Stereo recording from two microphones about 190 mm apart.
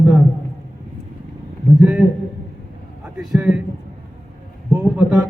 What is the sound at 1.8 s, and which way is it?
Speech, 5° right (ahead or behind).